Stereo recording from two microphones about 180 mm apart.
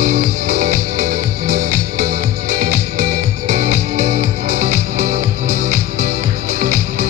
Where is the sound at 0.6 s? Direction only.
40° right (ahead or behind).